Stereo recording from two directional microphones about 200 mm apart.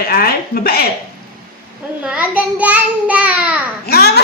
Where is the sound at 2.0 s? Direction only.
5° right (ahead or behind).